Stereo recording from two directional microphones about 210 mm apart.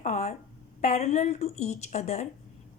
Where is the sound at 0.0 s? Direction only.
30° left (ahead or behind).